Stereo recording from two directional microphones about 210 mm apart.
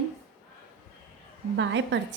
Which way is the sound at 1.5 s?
60° right (ahead or behind).